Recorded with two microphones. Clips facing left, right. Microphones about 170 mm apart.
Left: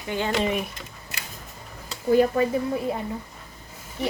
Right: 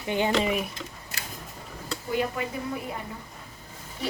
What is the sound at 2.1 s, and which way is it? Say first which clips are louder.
Speech: left 10 dB; 40° left (ahead or behind).